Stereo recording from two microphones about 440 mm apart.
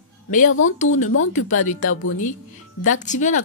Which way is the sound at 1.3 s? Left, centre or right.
Centre.